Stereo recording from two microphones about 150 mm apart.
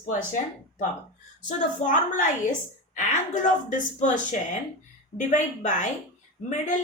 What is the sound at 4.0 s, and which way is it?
A woman's voice, 55° left (ahead or behind).